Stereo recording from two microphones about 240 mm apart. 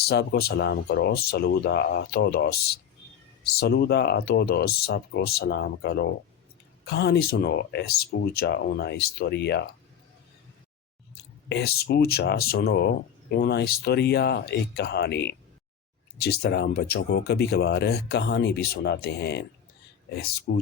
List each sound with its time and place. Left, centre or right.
0.0 s speech: left
11.4 s speech: left